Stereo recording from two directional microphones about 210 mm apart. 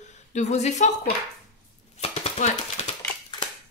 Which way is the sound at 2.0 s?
30° left (ahead or behind).